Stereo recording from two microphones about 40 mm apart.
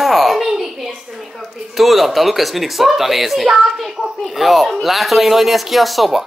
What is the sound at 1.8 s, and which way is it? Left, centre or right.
Speech, centre.